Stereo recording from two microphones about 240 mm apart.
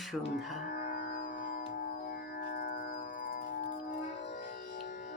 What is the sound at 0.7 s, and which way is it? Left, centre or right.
Music, left.